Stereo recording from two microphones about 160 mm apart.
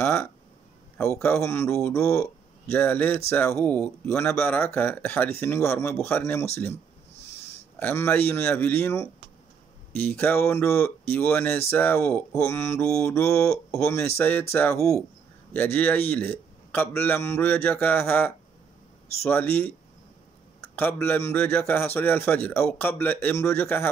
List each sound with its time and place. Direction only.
0.0 s a man's voice: 15° left (ahead or behind)
7.8 s a man's voice: 15° left (ahead or behind)